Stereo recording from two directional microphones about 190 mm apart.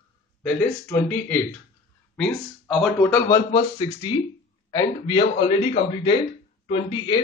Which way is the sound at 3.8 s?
25° left (ahead or behind).